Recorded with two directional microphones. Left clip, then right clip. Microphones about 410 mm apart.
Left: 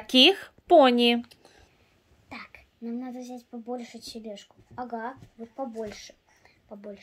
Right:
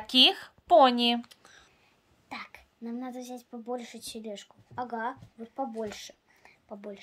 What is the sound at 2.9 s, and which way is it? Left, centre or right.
A woman's voice, centre.